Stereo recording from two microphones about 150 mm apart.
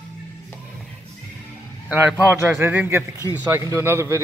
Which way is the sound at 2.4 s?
15° right (ahead or behind).